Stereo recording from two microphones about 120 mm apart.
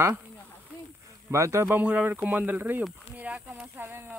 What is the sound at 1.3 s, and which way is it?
Speech, 25° right (ahead or behind).